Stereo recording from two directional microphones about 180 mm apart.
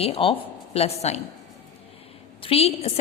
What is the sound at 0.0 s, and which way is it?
A woman's voice, 30° left (ahead or behind).